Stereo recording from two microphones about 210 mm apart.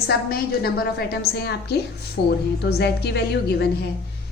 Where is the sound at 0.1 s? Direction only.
45° left (ahead or behind).